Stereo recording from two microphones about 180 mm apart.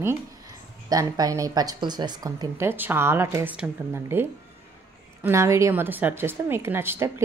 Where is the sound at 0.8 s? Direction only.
20° right (ahead or behind).